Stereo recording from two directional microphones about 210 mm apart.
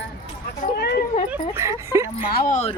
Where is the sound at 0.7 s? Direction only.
50° left (ahead or behind).